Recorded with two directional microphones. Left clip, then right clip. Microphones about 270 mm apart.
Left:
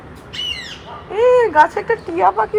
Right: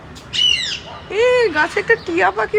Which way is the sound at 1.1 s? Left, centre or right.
Centre.